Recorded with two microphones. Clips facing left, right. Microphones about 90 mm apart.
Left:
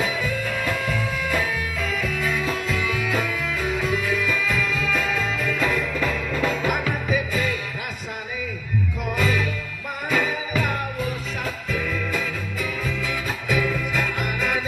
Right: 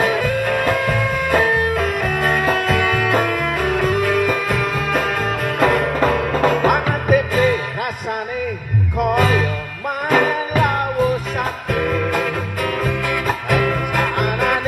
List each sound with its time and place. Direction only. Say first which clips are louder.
0.0 s music: right 8 dB; 55° right (ahead or behind)
9.0 s music: right 9 dB; 55° right (ahead or behind)